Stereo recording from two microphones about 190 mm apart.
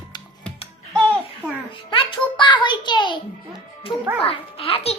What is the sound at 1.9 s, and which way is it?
A child's voice, 25° left (ahead or behind).